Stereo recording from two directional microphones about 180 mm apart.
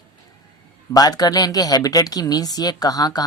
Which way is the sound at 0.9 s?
20° left (ahead or behind).